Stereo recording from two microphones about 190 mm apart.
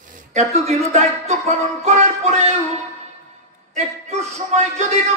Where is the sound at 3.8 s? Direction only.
35° right (ahead or behind).